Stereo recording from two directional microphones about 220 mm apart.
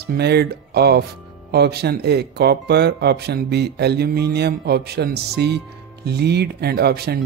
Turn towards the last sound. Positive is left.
turn(degrees=-45)  # may be behind; listen again after turning